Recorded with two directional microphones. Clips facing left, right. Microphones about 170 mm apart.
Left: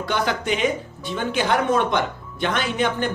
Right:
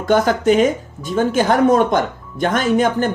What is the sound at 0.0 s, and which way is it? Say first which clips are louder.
Speech: right 9 dB; 45° right (ahead or behind).